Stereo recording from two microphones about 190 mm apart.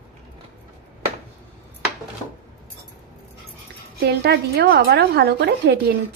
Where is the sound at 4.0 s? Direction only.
60° right (ahead or behind).